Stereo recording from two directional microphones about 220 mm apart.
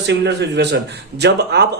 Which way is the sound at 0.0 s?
50° right (ahead or behind).